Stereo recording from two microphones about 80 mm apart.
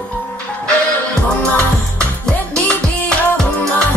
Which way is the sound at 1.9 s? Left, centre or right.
Centre.